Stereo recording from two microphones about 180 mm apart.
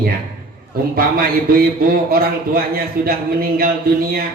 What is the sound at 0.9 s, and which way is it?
Speech, 55° right (ahead or behind).